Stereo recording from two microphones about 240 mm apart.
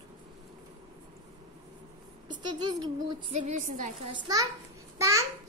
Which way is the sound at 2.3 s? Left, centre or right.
Centre.